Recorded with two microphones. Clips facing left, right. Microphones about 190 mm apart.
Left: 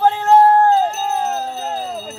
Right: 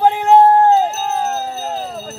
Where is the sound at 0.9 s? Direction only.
5° right (ahead or behind).